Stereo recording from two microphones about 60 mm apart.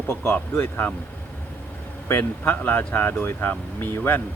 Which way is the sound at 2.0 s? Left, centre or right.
Left.